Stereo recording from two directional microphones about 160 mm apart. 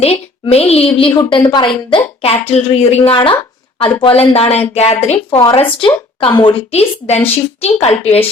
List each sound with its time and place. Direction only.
0.4 s speech: 40° left (ahead or behind)
1.3 s a woman's voice: 25° left (ahead or behind)
2.2 s a woman's voice: 40° left (ahead or behind)
5.3 s a woman's voice: 30° left (ahead or behind)